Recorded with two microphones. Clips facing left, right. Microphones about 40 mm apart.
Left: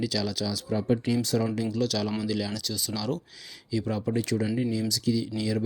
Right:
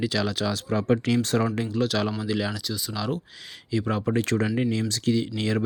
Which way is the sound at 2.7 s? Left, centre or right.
Centre.